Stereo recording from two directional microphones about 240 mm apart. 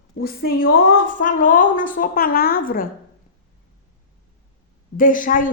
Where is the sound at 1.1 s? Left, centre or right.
Left.